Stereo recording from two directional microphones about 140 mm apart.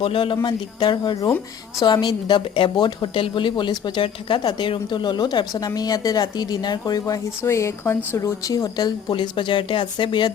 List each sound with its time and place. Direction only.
0.0 s speech: 40° left (ahead or behind)